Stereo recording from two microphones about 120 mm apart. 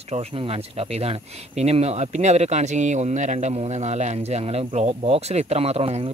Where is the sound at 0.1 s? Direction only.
55° right (ahead or behind).